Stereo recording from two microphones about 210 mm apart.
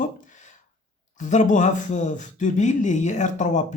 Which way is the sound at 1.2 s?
35° left (ahead or behind).